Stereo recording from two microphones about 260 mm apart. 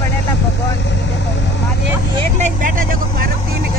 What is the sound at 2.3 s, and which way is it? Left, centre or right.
Vehicle, right.